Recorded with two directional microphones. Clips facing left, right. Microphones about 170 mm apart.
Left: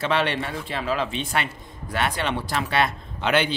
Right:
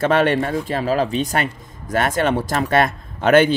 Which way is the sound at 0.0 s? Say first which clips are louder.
Right 7 dB; 45° right (ahead or behind).